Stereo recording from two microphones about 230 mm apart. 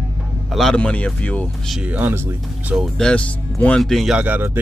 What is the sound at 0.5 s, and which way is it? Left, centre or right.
Speech, centre.